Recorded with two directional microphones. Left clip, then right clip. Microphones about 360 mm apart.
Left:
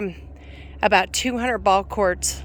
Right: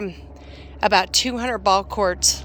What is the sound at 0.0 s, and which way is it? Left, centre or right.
A woman's voice, centre.